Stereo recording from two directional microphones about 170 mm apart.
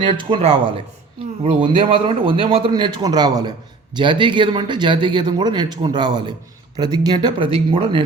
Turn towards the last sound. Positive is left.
turn(degrees=-30)  # may be behind; listen again after turning